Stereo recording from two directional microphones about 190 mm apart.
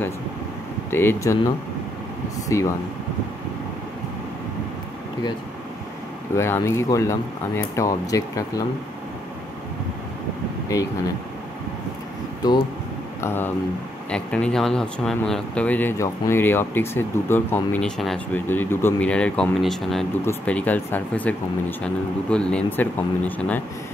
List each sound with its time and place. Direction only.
0.8 s speech: 10° left (ahead or behind)
2.4 s speech: 15° left (ahead or behind)
6.3 s speech: 15° left (ahead or behind)
12.4 s speech: 20° left (ahead or behind)
13.2 s speech: 10° left (ahead or behind)